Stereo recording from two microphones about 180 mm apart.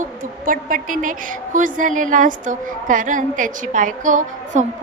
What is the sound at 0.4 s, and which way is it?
Speech, 50° right (ahead or behind).